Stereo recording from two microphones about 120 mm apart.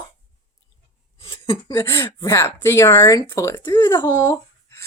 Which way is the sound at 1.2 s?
40° left (ahead or behind).